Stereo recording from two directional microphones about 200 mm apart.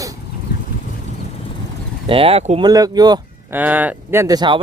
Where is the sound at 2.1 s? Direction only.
30° right (ahead or behind).